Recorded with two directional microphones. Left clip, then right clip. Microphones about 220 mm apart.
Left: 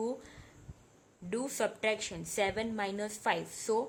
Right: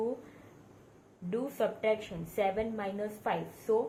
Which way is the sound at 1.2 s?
50° left (ahead or behind).